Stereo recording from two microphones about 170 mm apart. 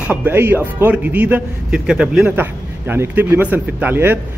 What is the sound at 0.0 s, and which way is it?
Speech, 10° right (ahead or behind).